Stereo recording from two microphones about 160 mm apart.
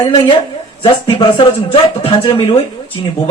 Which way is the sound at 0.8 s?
30° left (ahead or behind).